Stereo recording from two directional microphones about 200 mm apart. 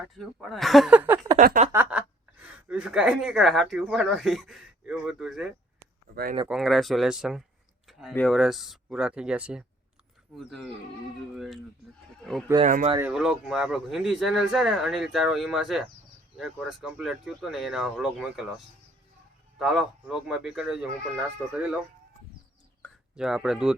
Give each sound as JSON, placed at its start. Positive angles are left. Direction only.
{"t": 0.2, "sound": "speech", "side_deg": 0}
{"t": 1.4, "sound": "a sound", "side_deg": -40}
{"t": 1.7, "sound": "speech", "side_deg": -10}
{"t": 6.5, "sound": "speech", "side_deg": 0}
{"t": 12.6, "sound": "a sound", "side_deg": -40}
{"t": 13.0, "sound": "speech", "side_deg": -5}
{"t": 23.1, "sound": "speech", "side_deg": 0}